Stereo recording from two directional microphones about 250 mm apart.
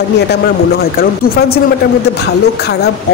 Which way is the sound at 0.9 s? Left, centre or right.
Left.